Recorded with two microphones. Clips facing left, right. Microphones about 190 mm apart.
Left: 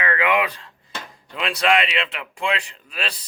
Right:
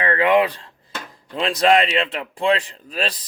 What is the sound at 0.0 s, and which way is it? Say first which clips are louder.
Speech: right 5 dB; 35° right (ahead or behind).